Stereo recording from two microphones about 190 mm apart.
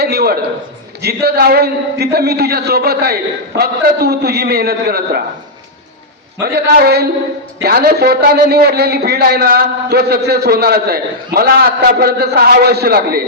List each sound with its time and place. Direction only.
0.0 s a sound: 55° right (ahead or behind)
1.0 s a man's voice: 55° right (ahead or behind)
6.4 s a man's voice: 55° right (ahead or behind)